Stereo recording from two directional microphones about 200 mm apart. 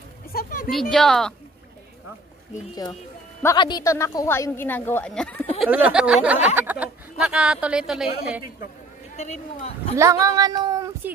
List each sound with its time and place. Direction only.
0.3 s a sound: 45° left (ahead or behind)
0.7 s speech: centre (ahead or behind)
3.4 s a woman's voice: 20° left (ahead or behind); by 5.5 s 5° left (ahead or behind)
5.6 s speech: 5° right (ahead or behind)
9.1 s speech: 35° left (ahead or behind)
9.9 s speech: 15° right (ahead or behind)